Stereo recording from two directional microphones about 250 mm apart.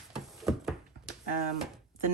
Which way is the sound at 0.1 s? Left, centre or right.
Centre.